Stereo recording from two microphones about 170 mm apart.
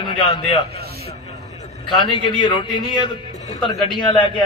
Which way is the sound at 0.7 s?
70° right (ahead or behind).